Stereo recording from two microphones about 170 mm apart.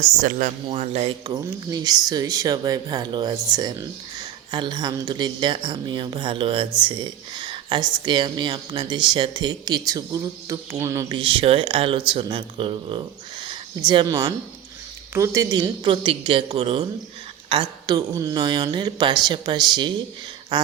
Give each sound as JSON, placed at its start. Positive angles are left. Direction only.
{"t": 0.2, "sound": "speech", "side_deg": -50}
{"t": 1.3, "sound": "speech", "side_deg": -25}
{"t": 11.1, "sound": "speech", "side_deg": -30}
{"t": 20.5, "sound": "a sound", "side_deg": -25}